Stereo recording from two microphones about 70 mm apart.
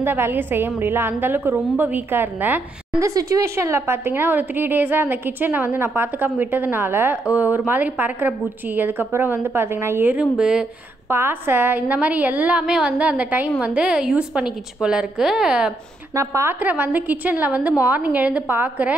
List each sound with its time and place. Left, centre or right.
0.0 s speech: right
3.0 s a woman's voice: right
10.3 s a woman's voice: centre
11.1 s a woman's voice: right; by 15.7 s centre
16.2 s a woman's voice: right
16.5 s a woman's voice: right